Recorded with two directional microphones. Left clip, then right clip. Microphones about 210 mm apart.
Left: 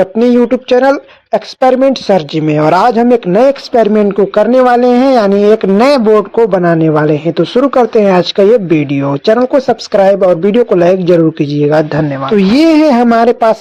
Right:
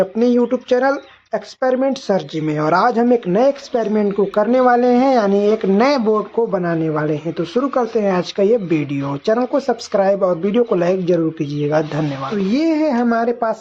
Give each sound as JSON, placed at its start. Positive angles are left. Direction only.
{"t": 0.0, "sound": "speech", "side_deg": 30}
{"t": 12.5, "sound": "speech", "side_deg": 45}